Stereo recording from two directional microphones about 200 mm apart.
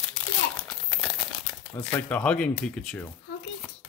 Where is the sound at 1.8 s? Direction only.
5° left (ahead or behind).